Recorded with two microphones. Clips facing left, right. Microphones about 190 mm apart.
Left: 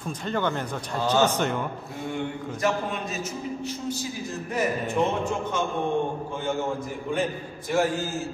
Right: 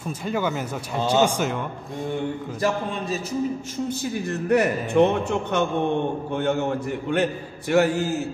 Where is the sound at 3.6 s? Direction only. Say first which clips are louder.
Right 3 dB; 50° right (ahead or behind).